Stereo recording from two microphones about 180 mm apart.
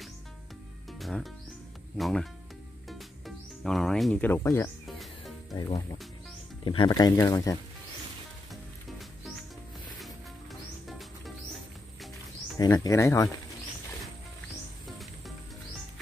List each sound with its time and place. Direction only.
0.9 s music: centre (ahead or behind)
2.0 s speech: centre (ahead or behind)
2.9 s music: centre (ahead or behind)
4.8 s insect: centre (ahead or behind)
6.6 s speech: 25° left (ahead or behind)
9.9 s music: centre (ahead or behind)
12.5 s speech: 20° left (ahead or behind)
14.9 s music: centre (ahead or behind)